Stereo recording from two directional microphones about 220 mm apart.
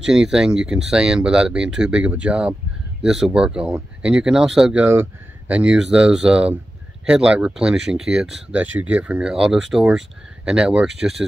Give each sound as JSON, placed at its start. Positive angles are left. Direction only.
{"t": 0.0, "sound": "speech", "side_deg": -5}